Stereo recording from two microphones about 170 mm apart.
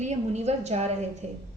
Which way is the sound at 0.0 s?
40° right (ahead or behind).